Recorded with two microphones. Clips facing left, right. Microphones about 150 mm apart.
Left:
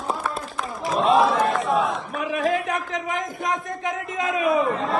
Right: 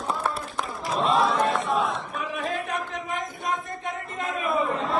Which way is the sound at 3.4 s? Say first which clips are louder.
Left 5 dB; 90° left.